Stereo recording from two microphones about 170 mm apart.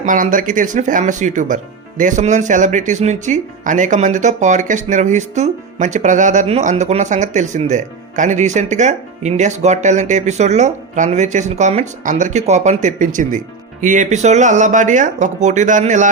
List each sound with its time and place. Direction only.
0.0 s speech: 50° right (ahead or behind)